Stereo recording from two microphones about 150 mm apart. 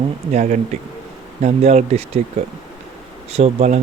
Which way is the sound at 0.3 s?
55° right (ahead or behind).